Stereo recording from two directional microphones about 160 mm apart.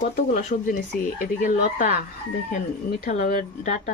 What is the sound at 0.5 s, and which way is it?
Speech, 60° left (ahead or behind).